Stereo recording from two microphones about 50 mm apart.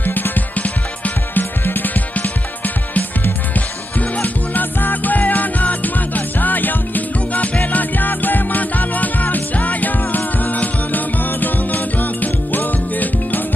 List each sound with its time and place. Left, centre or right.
0.0 s music: left
4.2 s music: left